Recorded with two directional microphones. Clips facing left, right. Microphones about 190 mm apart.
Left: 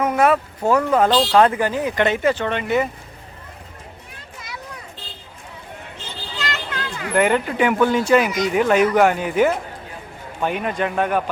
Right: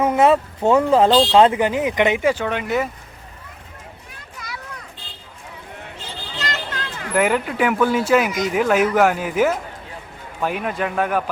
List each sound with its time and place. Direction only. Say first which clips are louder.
0.0 s speech: right 2 dB; 25° right (ahead or behind); by 2.9 s centre (ahead or behind)
4.4 s children playing: right 2 dB; 25° left (ahead or behind)
6.4 s children playing: even; 40° right (ahead or behind)
7.1 s speech: left 1 dB; 5° right (ahead or behind)